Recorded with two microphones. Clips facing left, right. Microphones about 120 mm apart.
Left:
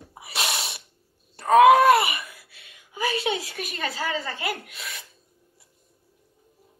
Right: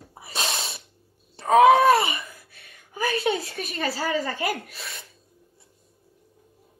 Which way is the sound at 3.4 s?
30° right (ahead or behind).